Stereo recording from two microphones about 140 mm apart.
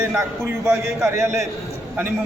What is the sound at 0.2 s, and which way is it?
A man's voice, 20° right (ahead or behind).